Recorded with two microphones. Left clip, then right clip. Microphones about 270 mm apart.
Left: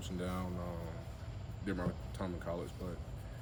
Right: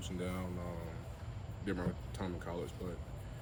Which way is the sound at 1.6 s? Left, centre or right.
Centre.